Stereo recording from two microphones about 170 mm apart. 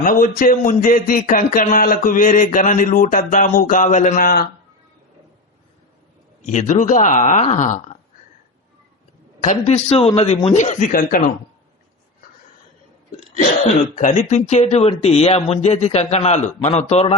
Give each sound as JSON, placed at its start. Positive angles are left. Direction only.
{"t": 0.0, "sound": "speech", "side_deg": 55}
{"t": 6.4, "sound": "speech", "side_deg": 45}
{"t": 9.4, "sound": "speech", "side_deg": 45}
{"t": 13.1, "sound": "throat clearing", "side_deg": 45}
{"t": 13.9, "sound": "speech", "side_deg": 45}